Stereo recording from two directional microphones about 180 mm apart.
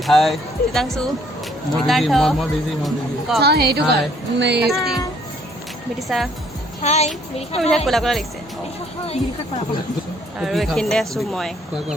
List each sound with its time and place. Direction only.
0.0 s speech: centre (ahead or behind)
3.4 s a woman's voice: 60° right (ahead or behind)
4.6 s speech: centre (ahead or behind)
6.1 s speech: centre (ahead or behind)
6.8 s speech: 35° left (ahead or behind)
7.9 s speech: centre (ahead or behind)
9.0 s speech: 35° left (ahead or behind)
10.4 s speech: centre (ahead or behind)